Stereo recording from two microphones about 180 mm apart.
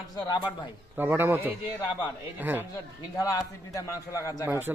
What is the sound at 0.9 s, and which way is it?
Speech, 10° right (ahead or behind).